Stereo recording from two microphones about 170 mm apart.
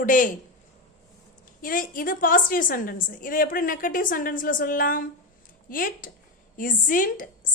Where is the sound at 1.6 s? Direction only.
55° left (ahead or behind).